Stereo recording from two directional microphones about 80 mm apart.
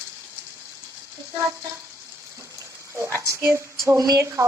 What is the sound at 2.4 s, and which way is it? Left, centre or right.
Water, right.